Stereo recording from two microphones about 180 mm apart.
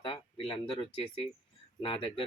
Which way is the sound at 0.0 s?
30° left (ahead or behind).